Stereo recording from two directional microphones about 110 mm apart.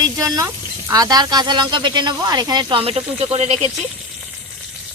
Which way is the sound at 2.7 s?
60° right (ahead or behind).